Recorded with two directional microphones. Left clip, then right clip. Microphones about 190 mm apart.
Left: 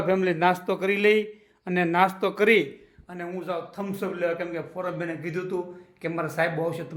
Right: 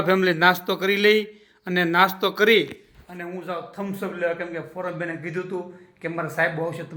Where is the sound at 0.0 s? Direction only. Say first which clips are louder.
Right 4 dB; 5° right (ahead or behind).